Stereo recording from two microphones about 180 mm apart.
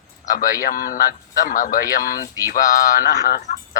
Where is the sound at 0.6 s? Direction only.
50° left (ahead or behind).